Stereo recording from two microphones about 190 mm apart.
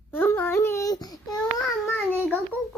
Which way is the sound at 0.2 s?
10° left (ahead or behind).